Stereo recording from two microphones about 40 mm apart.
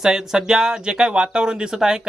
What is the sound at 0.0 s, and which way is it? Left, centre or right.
Speech, centre.